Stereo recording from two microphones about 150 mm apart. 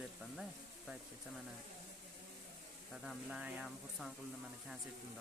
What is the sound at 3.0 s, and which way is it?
Speech, 10° right (ahead or behind).